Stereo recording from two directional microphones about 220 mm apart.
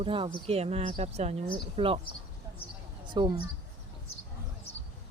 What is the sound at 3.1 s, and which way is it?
Speech, 20° right (ahead or behind).